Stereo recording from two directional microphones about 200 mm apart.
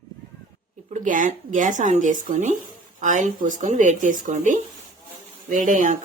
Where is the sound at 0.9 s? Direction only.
40° right (ahead or behind).